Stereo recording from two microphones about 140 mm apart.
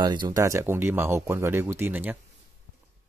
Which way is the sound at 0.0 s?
30° right (ahead or behind).